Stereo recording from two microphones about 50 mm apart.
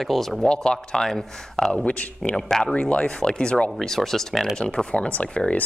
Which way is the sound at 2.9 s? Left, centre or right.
Left.